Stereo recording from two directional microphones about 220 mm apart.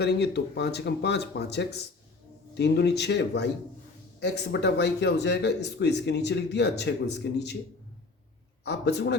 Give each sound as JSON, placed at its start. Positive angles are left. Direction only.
{"t": 0.0, "sound": "speech", "side_deg": 50}
{"t": 8.6, "sound": "speech", "side_deg": 50}